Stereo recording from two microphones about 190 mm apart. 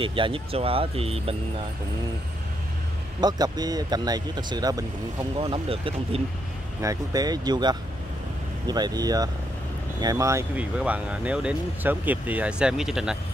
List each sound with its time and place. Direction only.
0.0 s speech: 25° right (ahead or behind)
3.2 s speech: 20° right (ahead or behind)
6.8 s speech: 20° right (ahead or behind)